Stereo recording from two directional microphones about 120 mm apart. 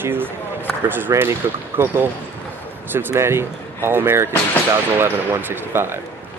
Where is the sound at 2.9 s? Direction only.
20° right (ahead or behind).